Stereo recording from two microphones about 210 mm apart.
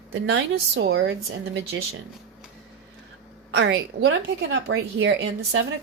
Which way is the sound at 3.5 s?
65° right (ahead or behind).